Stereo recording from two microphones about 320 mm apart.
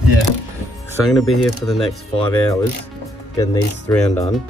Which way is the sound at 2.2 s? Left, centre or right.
Centre.